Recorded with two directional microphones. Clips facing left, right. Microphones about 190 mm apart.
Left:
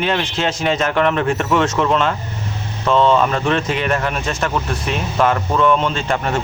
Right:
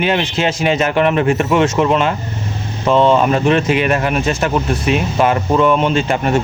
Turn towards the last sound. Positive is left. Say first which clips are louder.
# right 5 dB
turn(degrees=-15)  # may be behind; listen again after turning